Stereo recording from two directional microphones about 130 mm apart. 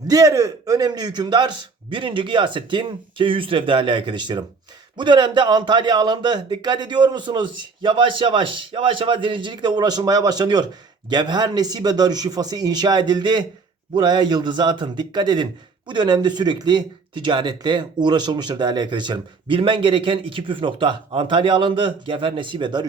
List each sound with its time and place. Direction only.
0.1 s speech: 25° right (ahead or behind)